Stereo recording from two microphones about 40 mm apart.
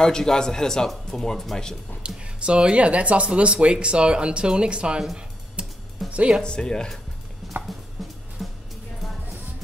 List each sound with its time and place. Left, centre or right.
0.0 s speech: centre
2.0 s speech: right
6.0 s music: centre
6.4 s speech: left
8.0 s music: centre